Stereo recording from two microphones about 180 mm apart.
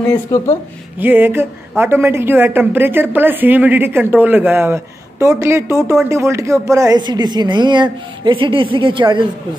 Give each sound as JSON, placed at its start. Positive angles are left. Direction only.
{"t": 0.3, "sound": "speech", "side_deg": 20}
{"t": 0.9, "sound": "a woman's voice", "side_deg": -10}